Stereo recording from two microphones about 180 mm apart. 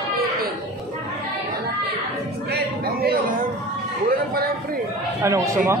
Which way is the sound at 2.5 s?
60° right (ahead or behind).